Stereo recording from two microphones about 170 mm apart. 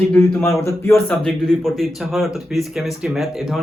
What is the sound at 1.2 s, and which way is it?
Speech, 5° left (ahead or behind).